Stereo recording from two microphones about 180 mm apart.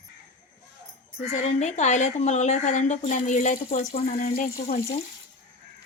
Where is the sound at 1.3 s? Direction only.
40° left (ahead or behind).